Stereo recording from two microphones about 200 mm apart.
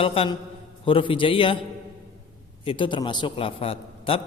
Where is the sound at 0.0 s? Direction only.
30° left (ahead or behind).